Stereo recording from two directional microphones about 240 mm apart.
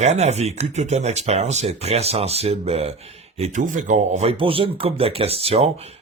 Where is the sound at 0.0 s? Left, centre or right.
Right.